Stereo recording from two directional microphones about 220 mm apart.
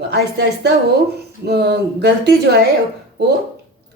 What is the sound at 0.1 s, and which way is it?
A woman's voice, 50° right (ahead or behind).